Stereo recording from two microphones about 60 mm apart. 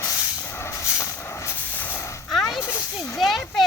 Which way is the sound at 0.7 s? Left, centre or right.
Left.